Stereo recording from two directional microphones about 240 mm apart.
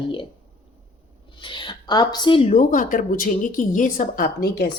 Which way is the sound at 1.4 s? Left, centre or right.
Centre.